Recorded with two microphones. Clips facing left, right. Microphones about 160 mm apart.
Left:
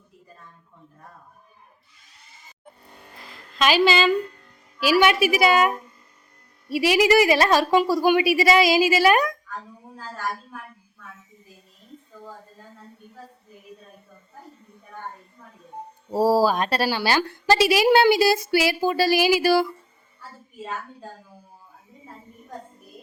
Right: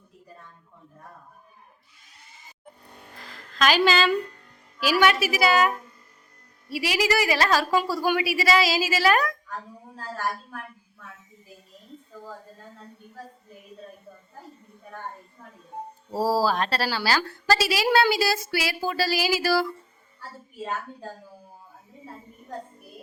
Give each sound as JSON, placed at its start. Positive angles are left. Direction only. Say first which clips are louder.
{"t": 3.8, "sound": "a woman's voice", "louder": "left 5 dB", "side_deg": 10}
{"t": 16.1, "sound": "a woman's voice", "louder": "left 4 dB", "side_deg": 15}